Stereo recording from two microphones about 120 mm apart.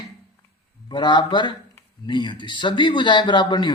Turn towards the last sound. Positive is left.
turn(degrees=40)  # may be behind; listen again after turning